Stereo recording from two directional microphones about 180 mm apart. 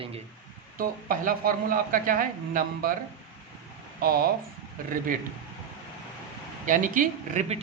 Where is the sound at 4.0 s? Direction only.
55° right (ahead or behind).